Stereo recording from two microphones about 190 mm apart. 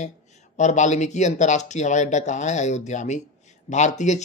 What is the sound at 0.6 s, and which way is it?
Speech, 40° left (ahead or behind).